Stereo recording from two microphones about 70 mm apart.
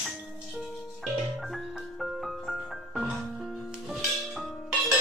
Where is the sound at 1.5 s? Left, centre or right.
Centre.